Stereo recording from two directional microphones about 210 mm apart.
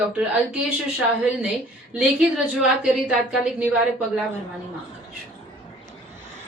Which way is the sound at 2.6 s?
5° right (ahead or behind).